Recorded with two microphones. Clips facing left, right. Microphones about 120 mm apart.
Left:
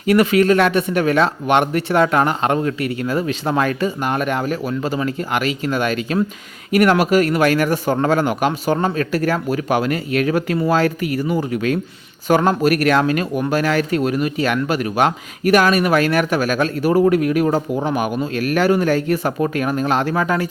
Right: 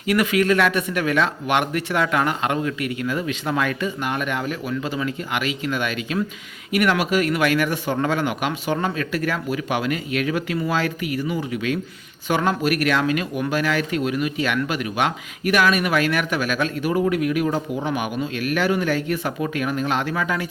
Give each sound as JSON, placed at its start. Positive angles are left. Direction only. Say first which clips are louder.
{"t": 0.0, "sound": "speech", "louder": "left 5 dB", "side_deg": 30}